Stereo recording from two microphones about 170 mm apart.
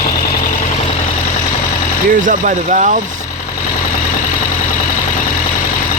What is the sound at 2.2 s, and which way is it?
Speech, 50° right (ahead or behind).